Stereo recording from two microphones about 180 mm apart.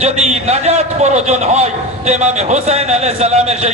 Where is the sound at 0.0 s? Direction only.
35° right (ahead or behind).